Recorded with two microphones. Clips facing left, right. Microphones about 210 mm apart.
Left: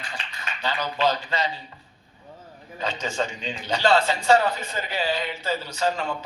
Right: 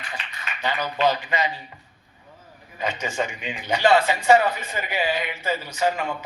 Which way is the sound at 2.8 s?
15° right (ahead or behind).